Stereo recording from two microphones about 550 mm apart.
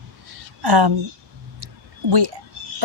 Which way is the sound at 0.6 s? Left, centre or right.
Right.